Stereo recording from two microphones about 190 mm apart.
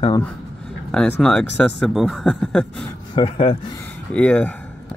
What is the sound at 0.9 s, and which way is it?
Speech, 5° left (ahead or behind).